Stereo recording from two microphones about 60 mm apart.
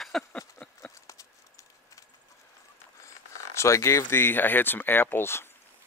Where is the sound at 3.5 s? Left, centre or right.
Left.